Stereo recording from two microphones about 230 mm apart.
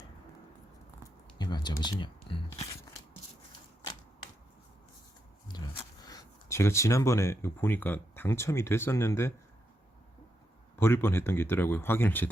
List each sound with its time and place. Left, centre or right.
1.4 s a sound: centre
1.8 s speech: centre
5.5 s speech: centre
10.8 s speech: centre